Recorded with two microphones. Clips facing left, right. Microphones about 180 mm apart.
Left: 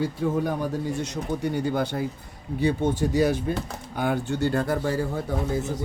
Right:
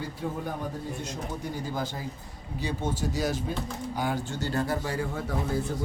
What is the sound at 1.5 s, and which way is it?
Speech, 65° left (ahead or behind).